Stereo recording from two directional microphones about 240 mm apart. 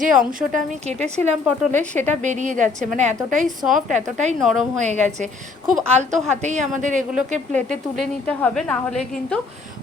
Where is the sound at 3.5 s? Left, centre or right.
Centre.